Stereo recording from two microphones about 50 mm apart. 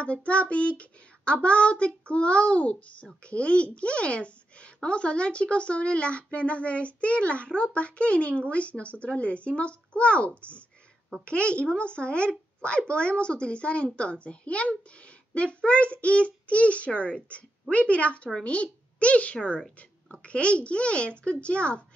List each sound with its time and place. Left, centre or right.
0.0 s a woman's voice: left